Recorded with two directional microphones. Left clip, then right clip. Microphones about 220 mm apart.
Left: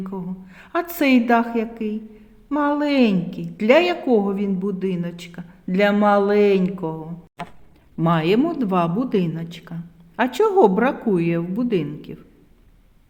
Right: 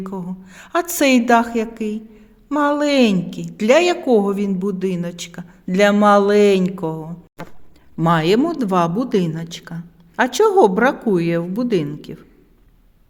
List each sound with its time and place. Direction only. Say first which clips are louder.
0.0 s a woman's voice: right 2 dB; 30° right (ahead or behind)